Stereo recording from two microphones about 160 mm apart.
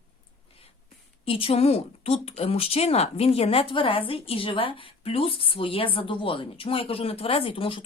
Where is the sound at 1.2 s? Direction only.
35° left (ahead or behind).